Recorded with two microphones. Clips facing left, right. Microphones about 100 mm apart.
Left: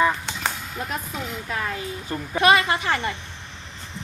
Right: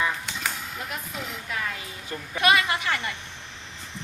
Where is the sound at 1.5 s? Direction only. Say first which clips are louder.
Left 5 dB; 40° left (ahead or behind).